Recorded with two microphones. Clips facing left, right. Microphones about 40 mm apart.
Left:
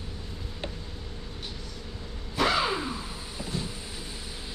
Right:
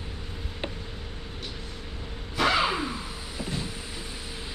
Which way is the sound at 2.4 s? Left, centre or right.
Right.